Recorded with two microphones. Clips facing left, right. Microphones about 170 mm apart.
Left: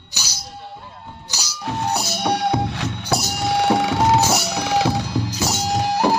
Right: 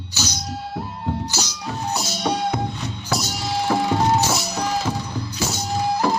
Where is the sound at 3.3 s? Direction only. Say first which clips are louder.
Left 4 dB; 60° left (ahead or behind).